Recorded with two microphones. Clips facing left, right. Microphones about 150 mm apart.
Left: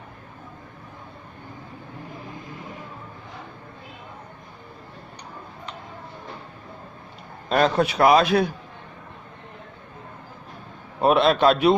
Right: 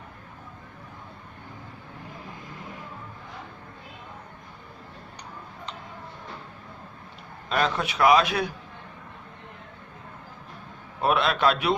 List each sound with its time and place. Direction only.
7.5 s a man's voice: 40° left (ahead or behind)
11.0 s a man's voice: 30° left (ahead or behind)